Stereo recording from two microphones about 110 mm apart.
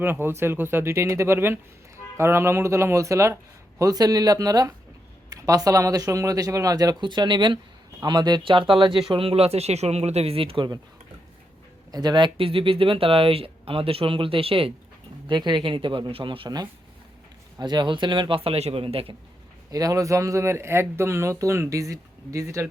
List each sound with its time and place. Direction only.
0.0 s a man's voice: 20° right (ahead or behind); by 10.7 s 55° right (ahead or behind)
11.9 s speech: 35° right (ahead or behind); by 14.7 s 55° right (ahead or behind)
15.3 s a man's voice: 45° right (ahead or behind)
17.6 s a man's voice: 45° right (ahead or behind)
19.7 s speech: 30° right (ahead or behind)